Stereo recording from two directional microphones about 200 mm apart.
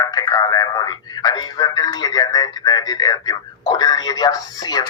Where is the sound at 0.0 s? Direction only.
20° left (ahead or behind).